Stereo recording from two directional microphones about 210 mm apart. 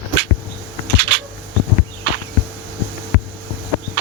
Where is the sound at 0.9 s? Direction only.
55° right (ahead or behind).